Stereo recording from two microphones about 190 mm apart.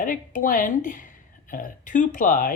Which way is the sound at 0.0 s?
45° left (ahead or behind).